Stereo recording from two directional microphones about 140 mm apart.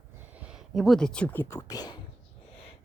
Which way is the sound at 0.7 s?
Centre (ahead or behind).